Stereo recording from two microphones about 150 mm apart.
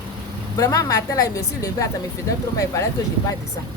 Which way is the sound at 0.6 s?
20° left (ahead or behind).